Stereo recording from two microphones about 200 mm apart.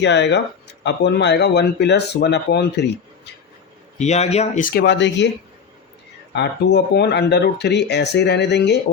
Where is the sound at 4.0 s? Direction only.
35° left (ahead or behind); by 5.3 s 60° left (ahead or behind).